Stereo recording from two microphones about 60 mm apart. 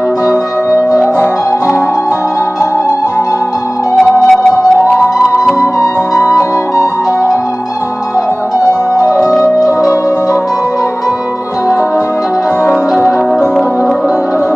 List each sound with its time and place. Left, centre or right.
3.9 s music: centre
5.6 s music: left
8.9 s music: left
12.6 s music: left